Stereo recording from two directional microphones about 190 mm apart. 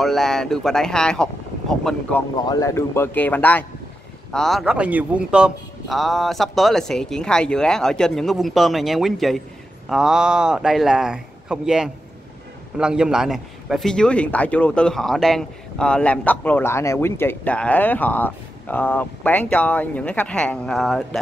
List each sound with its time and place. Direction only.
0.0 s a man's voice: centre (ahead or behind)
2.4 s a man's voice: 15° left (ahead or behind)